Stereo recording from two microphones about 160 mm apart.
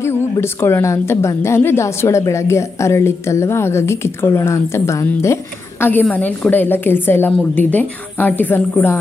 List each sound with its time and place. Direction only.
0.0 s a woman's voice: 15° left (ahead or behind)